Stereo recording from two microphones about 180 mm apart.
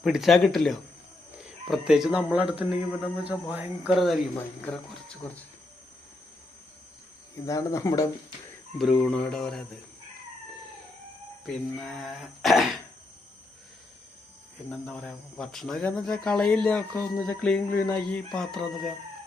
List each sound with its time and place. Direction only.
0.0 s speech: centre (ahead or behind)
7.4 s speech: 15° left (ahead or behind)
8.8 s speech: centre (ahead or behind)
11.4 s speech: centre (ahead or behind)
14.7 s speech: 5° left (ahead or behind)